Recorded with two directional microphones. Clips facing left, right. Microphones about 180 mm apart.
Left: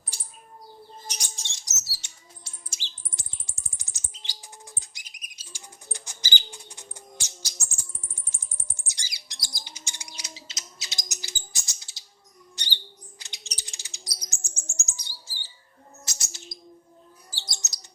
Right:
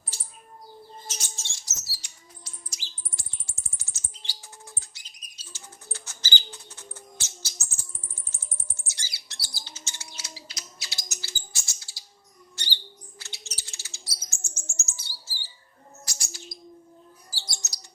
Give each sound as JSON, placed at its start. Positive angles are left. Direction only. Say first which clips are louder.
{"t": 1.0, "sound": "bird", "louder": "even", "side_deg": 15}
{"t": 8.3, "sound": "chirp", "louder": "right 1 dB", "side_deg": 15}
{"t": 12.5, "sound": "bird", "louder": "right 1 dB", "side_deg": 15}